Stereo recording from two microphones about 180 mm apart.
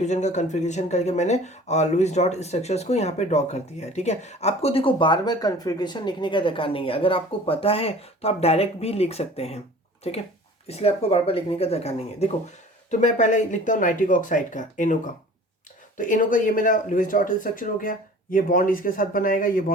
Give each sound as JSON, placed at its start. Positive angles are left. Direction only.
{"t": 0.0, "sound": "speech", "side_deg": 40}
{"t": 10.7, "sound": "speech", "side_deg": 35}